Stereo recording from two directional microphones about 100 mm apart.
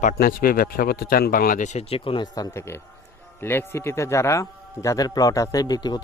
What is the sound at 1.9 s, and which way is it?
Speech, 65° left (ahead or behind).